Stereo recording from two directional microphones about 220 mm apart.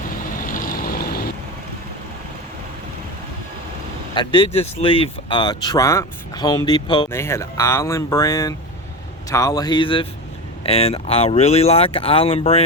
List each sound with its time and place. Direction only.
0.4 s vehicle: 40° left (ahead or behind)
4.1 s speech: 20° left (ahead or behind)